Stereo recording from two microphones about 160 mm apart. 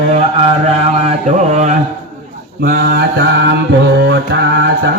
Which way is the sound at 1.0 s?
45° right (ahead or behind).